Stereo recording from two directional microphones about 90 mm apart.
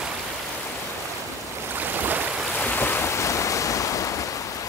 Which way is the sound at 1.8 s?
20° right (ahead or behind).